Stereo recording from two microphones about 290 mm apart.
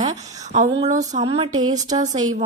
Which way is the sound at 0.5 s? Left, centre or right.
Right.